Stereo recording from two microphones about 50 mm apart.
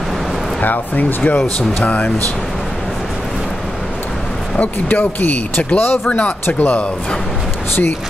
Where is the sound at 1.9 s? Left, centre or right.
Left.